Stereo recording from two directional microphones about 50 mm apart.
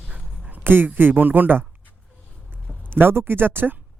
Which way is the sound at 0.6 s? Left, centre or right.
Right.